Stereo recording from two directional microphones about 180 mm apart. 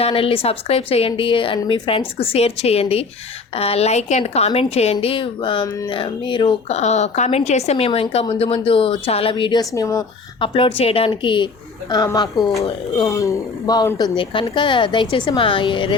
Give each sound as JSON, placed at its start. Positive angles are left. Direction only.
{"t": 0.0, "sound": "a woman's voice", "side_deg": 30}
{"t": 12.3, "sound": "speech", "side_deg": 0}
{"t": 13.1, "sound": "speech", "side_deg": 15}